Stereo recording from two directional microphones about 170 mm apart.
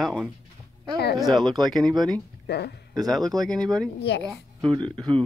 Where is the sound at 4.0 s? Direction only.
80° left.